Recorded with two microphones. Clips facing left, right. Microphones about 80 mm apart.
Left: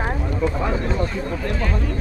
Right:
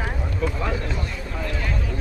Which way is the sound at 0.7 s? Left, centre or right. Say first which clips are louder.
Left 6 dB; left.